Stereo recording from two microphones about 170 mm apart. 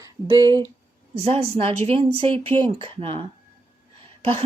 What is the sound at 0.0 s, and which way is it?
Speech, 20° right (ahead or behind).